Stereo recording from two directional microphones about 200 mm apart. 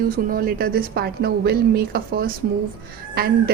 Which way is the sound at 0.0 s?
45° right (ahead or behind).